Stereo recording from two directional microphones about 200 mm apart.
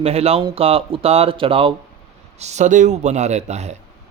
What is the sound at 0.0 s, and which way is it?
Speech, 30° right (ahead or behind).